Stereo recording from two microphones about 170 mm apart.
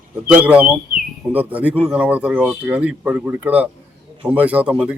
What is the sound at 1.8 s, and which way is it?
Speech, 5° right (ahead or behind).